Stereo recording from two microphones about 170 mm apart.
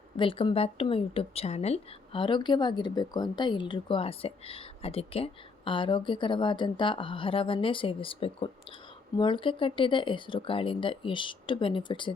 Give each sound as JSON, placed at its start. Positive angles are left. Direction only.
{"t": 0.2, "sound": "a woman's voice", "side_deg": 30}